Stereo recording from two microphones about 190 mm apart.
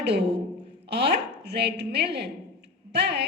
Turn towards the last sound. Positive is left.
turn(degrees=-60)  # may be behind; listen again after turning